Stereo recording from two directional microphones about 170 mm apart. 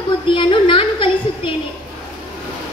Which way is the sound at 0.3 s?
30° left (ahead or behind).